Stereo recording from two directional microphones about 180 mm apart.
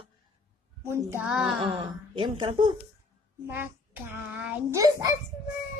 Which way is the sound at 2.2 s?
25° right (ahead or behind).